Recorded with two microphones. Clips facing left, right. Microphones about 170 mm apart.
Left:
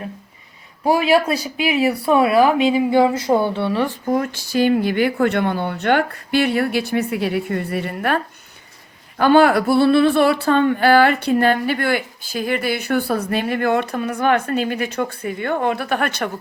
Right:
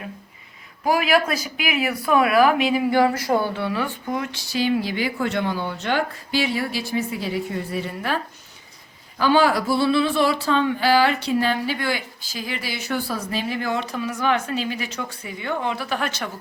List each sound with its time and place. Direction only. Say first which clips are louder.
0.9 s speech: left 4 dB; 30° left (ahead or behind)
4.0 s speech: left 7 dB; 45° left (ahead or behind)